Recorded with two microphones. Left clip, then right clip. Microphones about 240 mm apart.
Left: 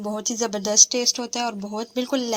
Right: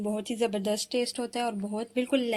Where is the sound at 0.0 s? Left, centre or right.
Left.